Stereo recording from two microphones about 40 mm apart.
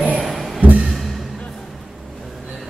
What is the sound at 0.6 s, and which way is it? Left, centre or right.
Music, right.